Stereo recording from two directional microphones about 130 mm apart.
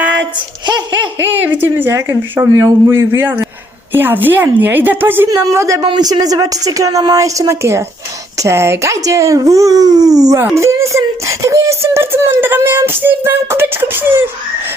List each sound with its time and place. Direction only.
1.2 s a child's voice: 15° right (ahead or behind)